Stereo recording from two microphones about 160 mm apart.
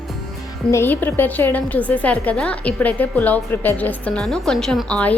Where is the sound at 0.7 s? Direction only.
15° left (ahead or behind).